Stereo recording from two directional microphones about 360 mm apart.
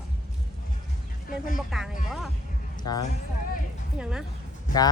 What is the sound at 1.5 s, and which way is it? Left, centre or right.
Speech, centre.